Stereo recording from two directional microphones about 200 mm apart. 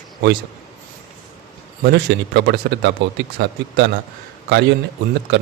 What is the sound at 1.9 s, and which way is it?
Speech, 55° right (ahead or behind).